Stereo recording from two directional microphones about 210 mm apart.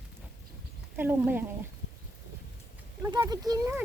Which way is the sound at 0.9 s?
10° right (ahead or behind).